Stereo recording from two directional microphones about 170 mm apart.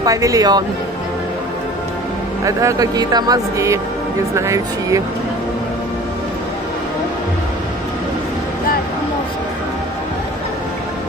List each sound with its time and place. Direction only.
0.0 s speech: 20° right (ahead or behind)
2.4 s speech: 20° right (ahead or behind)